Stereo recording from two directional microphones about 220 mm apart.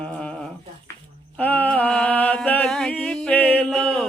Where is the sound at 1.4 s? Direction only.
5° left (ahead or behind).